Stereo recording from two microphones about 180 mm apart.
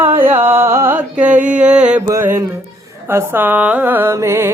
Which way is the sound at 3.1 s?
10° right (ahead or behind).